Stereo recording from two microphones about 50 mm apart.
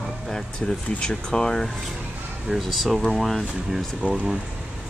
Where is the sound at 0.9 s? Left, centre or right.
Centre.